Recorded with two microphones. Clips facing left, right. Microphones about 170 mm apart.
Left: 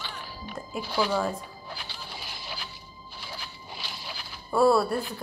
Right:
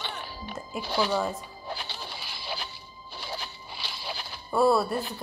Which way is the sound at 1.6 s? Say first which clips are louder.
Right 4 dB; 25° right (ahead or behind).